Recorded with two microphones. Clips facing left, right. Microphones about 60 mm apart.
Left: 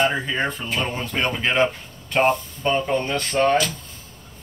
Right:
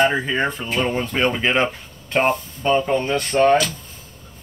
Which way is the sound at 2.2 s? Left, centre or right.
Centre.